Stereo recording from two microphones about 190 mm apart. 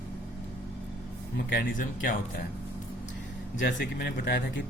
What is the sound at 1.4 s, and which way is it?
Speech, 45° left (ahead or behind).